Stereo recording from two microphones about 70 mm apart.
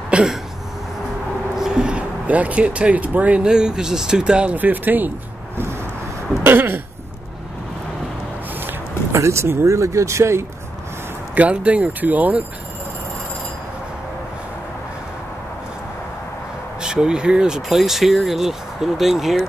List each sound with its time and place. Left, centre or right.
0.1 s a sound: centre
1.6 s speech: centre
6.4 s a sound: right
9.1 s speech: right
11.3 s speech: centre
16.8 s speech: centre